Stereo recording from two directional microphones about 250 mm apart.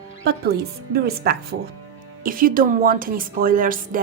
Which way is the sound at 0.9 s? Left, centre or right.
Right.